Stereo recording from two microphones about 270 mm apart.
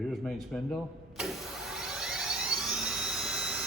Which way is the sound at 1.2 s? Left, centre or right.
Centre.